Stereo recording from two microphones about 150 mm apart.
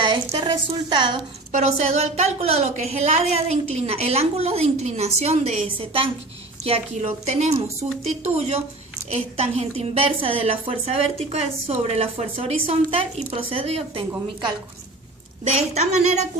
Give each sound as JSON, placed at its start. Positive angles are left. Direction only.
{"t": 0.0, "sound": "a woman's voice", "side_deg": -30}
{"t": 1.5, "sound": "a woman's voice", "side_deg": -50}
{"t": 15.4, "sound": "a woman's voice", "side_deg": -45}